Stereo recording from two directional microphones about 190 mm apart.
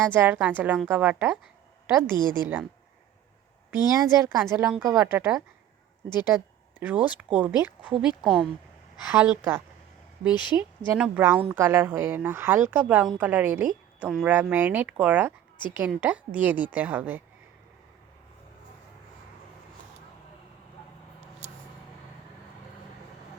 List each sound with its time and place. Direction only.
0.0 s a woman's voice: 10° right (ahead or behind)
2.1 s a woman's voice: 20° left (ahead or behind)
3.8 s a woman's voice: 15° right (ahead or behind)